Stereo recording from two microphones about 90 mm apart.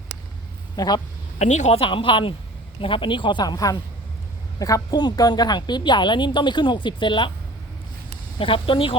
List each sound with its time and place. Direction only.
0.8 s speech: 50° left (ahead or behind)
1.7 s a woman's voice: 85° left; by 7.3 s 60° left (ahead or behind)
8.4 s speech: 80° left